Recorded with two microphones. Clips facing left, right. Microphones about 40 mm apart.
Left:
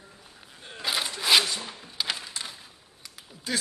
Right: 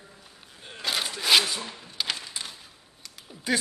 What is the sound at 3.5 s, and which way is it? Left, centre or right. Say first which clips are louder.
Speech: right 4 dB; centre.